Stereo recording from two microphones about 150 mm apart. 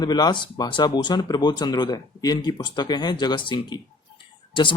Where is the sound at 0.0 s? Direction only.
30° left (ahead or behind).